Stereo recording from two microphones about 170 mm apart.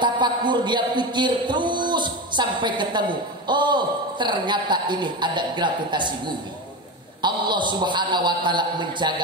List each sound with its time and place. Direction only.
0.0 s speech: 25° right (ahead or behind)